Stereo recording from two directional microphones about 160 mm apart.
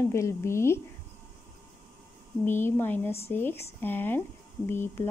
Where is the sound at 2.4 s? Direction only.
15° left (ahead or behind).